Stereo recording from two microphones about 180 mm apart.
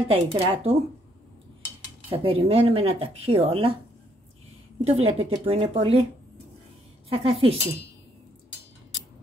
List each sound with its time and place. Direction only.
0.1 s speech: 30° right (ahead or behind)
2.0 s speech: 30° right (ahead or behind)
4.8 s speech: 35° right (ahead or behind)
7.1 s speech: 30° right (ahead or behind)